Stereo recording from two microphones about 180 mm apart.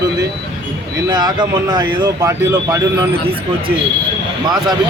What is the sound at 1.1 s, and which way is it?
Speech, 25° right (ahead or behind).